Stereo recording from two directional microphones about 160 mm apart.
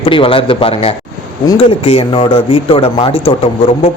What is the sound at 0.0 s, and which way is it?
Speech, 35° left (ahead or behind).